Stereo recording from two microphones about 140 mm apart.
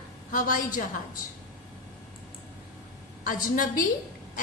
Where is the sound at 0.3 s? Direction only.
70° left (ahead or behind).